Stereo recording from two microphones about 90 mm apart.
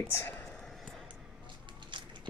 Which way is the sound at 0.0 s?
30° left (ahead or behind).